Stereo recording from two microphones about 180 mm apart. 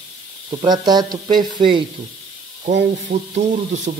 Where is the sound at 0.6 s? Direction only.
25° right (ahead or behind).